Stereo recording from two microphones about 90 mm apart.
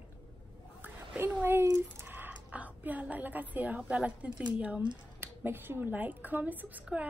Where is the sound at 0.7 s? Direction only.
25° right (ahead or behind).